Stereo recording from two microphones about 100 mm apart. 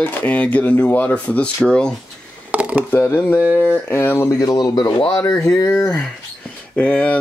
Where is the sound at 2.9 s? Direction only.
20° left (ahead or behind).